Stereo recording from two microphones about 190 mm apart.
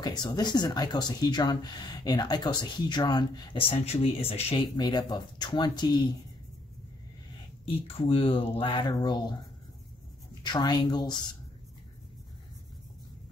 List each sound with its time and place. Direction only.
0.0 s speech: 20° left (ahead or behind)
7.6 s speech: 30° left (ahead or behind)
10.4 s speech: 20° left (ahead or behind)